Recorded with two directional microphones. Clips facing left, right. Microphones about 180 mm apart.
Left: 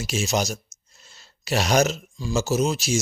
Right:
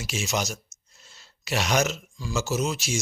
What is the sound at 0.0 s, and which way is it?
Speech, 40° left (ahead or behind).